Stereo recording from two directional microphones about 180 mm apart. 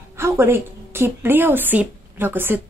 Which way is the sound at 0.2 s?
15° right (ahead or behind).